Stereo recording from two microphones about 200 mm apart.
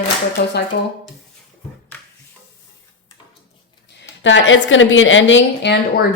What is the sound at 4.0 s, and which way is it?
A woman's voice, 65° left (ahead or behind).